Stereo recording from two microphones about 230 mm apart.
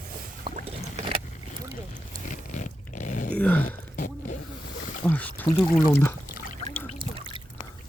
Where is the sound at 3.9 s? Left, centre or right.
Left.